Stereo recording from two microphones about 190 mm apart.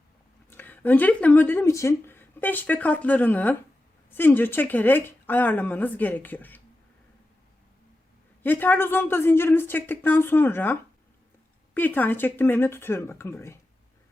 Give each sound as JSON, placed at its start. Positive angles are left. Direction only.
{"t": 0.5, "sound": "speech", "side_deg": 10}
{"t": 8.4, "sound": "speech", "side_deg": 10}